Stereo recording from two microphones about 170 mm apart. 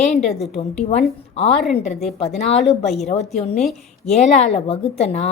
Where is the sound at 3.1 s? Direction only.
40° left (ahead or behind).